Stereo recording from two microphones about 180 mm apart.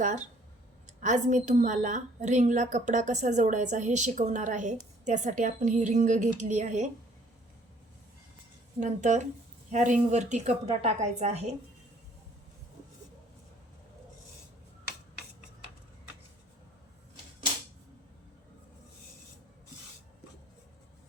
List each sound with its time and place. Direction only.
0.0 s a woman's voice: 40° right (ahead or behind)
8.8 s a woman's voice: 40° right (ahead or behind)